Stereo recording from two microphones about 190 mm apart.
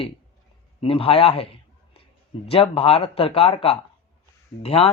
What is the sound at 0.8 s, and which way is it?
A man's voice, 30° left (ahead or behind).